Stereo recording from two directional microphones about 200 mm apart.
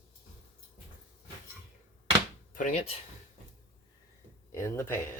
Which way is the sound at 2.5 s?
40° left (ahead or behind).